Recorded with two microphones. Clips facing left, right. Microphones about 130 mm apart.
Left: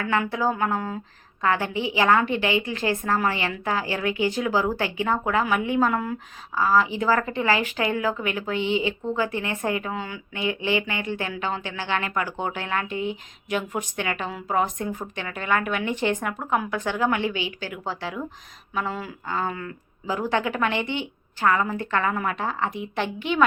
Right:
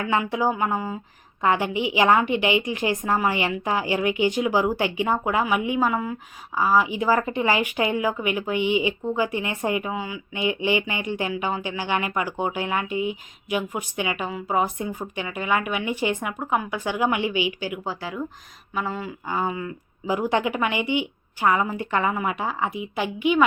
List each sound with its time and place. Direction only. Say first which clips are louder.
0.0 s a woman's voice: right 1 dB; 15° right (ahead or behind)
6.5 s a woman's voice: even; 15° right (ahead or behind)
19.3 s a woman's voice: right 2 dB; 10° right (ahead or behind)